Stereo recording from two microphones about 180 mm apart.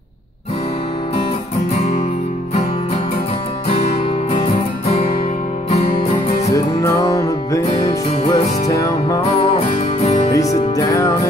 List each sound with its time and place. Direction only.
3.7 s music: 35° left (ahead or behind)
6.5 s music: 20° left (ahead or behind)
10.3 s music: 20° left (ahead or behind)